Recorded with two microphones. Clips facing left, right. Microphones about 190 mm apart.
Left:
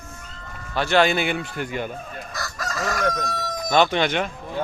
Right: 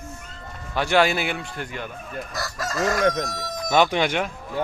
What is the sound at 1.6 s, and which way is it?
Speech, 15° left (ahead or behind).